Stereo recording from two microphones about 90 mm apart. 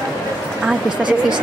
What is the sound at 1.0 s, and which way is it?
Speech, 60° right (ahead or behind).